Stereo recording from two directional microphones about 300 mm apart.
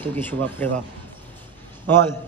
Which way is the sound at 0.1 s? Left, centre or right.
Centre.